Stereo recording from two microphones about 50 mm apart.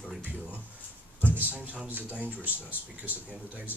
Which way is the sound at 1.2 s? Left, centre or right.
Right.